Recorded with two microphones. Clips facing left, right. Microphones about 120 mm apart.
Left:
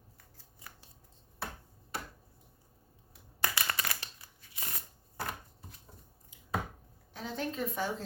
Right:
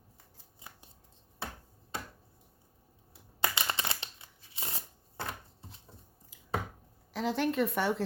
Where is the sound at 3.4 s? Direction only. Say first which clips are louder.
Right 1 dB; 20° right (ahead or behind).